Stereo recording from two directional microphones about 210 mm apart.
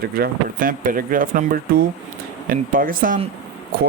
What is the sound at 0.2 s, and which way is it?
Speech, 40° right (ahead or behind).